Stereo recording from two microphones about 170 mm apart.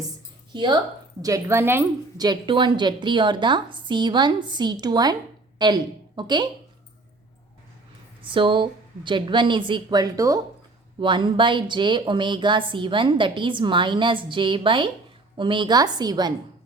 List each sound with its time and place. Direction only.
0.5 s speech: 30° right (ahead or behind)
1.2 s a woman's voice: 20° right (ahead or behind)
2.2 s a woman's voice: 25° right (ahead or behind)
8.3 s speech: 30° right (ahead or behind)